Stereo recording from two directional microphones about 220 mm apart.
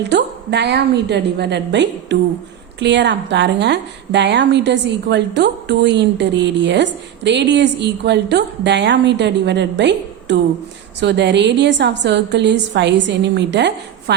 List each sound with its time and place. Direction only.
0.1 s a woman's voice: 50° right (ahead or behind)